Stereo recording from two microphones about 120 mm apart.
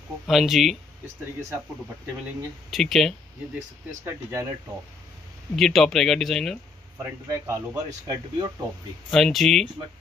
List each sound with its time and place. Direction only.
0.3 s speech: centre (ahead or behind)
2.7 s speech: centre (ahead or behind)
4.0 s speech: 25° right (ahead or behind)
5.6 s speech: centre (ahead or behind)
7.0 s speech: 25° right (ahead or behind)
9.1 s speech: centre (ahead or behind)